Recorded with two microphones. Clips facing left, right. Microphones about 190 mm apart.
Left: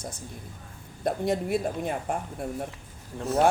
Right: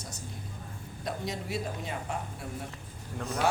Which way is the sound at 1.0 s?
55° left (ahead or behind).